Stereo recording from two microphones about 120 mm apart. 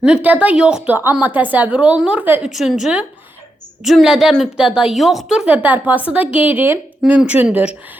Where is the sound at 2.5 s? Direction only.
Centre (ahead or behind).